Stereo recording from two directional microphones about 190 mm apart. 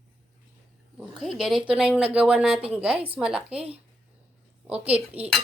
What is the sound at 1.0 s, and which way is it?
Speech, centre (ahead or behind).